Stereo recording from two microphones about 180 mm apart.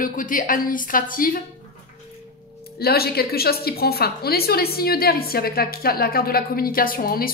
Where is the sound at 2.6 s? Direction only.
60° left (ahead or behind).